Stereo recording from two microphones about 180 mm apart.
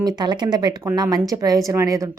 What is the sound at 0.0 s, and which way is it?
Speech, 25° right (ahead or behind).